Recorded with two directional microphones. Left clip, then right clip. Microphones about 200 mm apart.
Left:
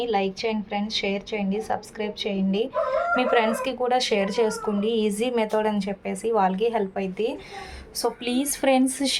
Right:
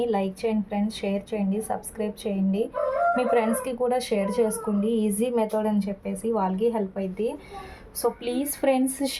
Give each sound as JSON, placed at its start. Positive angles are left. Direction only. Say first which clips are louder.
{"t": 0.0, "sound": "a woman's voice", "louder": "left 1 dB", "side_deg": -10}